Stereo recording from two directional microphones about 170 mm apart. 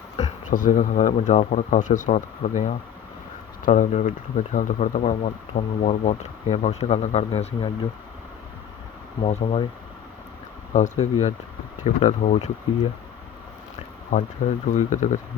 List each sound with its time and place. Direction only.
0.2 s speech: 45° left (ahead or behind)
9.2 s speech: 40° left (ahead or behind)
10.8 s speech: 45° left (ahead or behind)
14.1 s speech: 45° left (ahead or behind)